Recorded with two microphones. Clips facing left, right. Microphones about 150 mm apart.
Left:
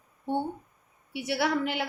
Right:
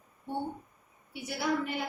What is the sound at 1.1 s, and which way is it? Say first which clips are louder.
Speech: left 4 dB; 80° left.